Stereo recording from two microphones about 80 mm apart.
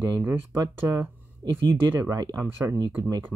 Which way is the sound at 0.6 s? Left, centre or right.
Right.